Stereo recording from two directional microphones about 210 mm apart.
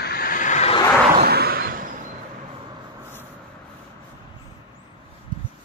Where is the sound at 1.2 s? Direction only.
50° right (ahead or behind).